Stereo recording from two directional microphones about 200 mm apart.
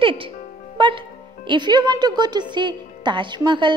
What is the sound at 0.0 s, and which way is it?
A woman's voice, 25° right (ahead or behind).